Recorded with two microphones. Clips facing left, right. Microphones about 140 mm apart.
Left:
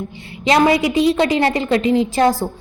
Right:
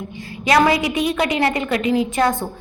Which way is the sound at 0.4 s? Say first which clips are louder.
Left 2 dB; 25° left (ahead or behind).